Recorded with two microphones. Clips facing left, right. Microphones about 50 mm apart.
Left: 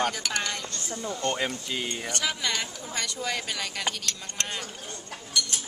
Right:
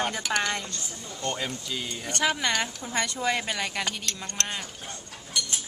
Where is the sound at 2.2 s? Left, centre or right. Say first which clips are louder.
Right 6 dB; right.